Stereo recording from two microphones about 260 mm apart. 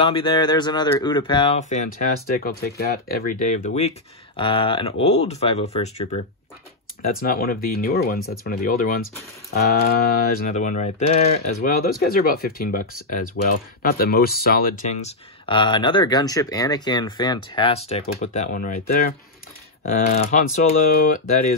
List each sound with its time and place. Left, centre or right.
0.0 s speech: centre